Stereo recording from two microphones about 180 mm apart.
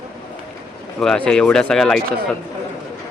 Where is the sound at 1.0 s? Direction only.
5° left (ahead or behind).